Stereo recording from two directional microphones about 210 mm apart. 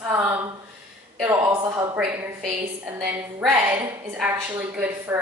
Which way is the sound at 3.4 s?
5° right (ahead or behind).